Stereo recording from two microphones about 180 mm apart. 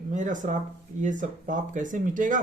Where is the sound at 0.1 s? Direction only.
45° right (ahead or behind).